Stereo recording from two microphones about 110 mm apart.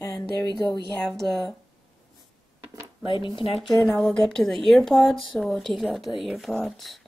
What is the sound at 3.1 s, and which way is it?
Speech, 50° left (ahead or behind).